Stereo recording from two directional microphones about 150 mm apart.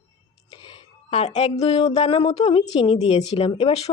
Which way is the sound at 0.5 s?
35° left (ahead or behind).